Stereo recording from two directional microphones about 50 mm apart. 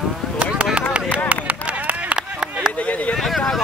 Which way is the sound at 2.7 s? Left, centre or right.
Left.